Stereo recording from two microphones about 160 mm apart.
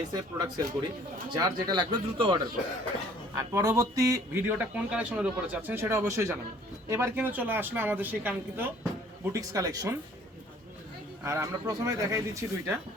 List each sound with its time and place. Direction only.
0.1 s speech: 25° right (ahead or behind)
11.2 s speech: 15° right (ahead or behind)